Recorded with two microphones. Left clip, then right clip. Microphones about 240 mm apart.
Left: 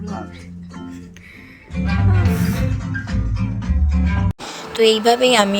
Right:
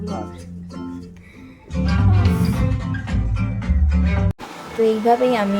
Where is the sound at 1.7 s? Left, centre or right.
Right.